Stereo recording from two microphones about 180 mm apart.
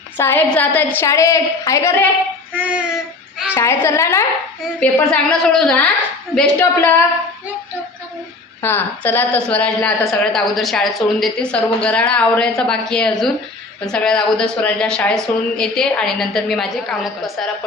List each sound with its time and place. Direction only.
0.2 s a woman's voice: 10° left (ahead or behind)
2.5 s child singing: 10° right (ahead or behind)
3.5 s a woman's voice: 15° left (ahead or behind)
8.6 s a woman's voice: 10° left (ahead or behind)